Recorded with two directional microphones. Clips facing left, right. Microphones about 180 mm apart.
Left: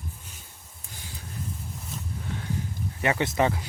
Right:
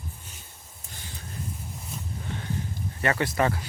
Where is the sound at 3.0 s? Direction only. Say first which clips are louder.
Left 1 dB; 15° left (ahead or behind).